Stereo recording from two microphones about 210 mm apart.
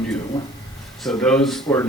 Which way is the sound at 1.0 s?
5° left (ahead or behind).